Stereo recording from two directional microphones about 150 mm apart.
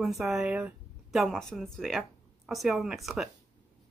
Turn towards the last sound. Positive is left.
turn(degrees=-5)  # may be behind; listen again after turning